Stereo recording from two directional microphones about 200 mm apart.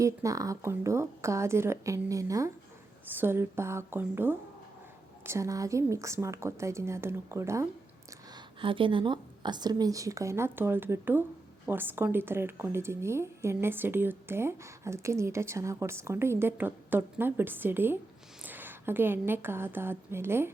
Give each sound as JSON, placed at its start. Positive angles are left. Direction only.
{"t": 0.0, "sound": "speech", "side_deg": -15}
{"t": 8.6, "sound": "a woman's voice", "side_deg": -25}